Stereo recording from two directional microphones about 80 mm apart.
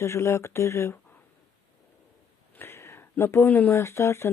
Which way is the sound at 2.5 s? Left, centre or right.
Left.